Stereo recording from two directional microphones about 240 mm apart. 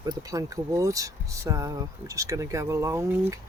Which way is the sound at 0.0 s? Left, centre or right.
Centre.